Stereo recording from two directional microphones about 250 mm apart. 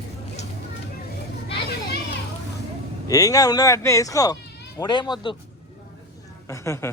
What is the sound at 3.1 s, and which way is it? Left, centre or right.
Speech, centre.